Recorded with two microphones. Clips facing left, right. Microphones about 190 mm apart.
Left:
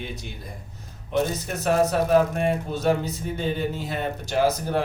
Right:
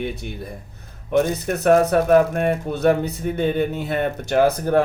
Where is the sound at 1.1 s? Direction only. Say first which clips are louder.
Right 5 dB; 60° right (ahead or behind).